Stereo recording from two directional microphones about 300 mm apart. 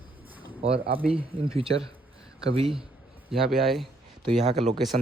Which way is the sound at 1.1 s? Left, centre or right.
Centre.